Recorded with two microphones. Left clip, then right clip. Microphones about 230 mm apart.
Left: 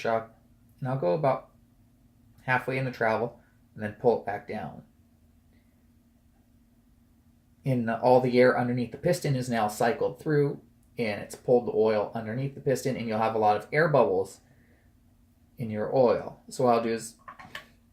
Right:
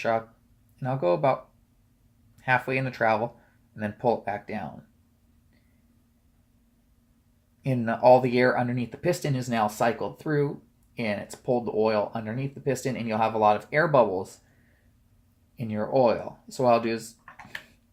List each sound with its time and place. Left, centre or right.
0.8 s speech: right
2.4 s speech: right
7.6 s speech: right
15.5 s speech: right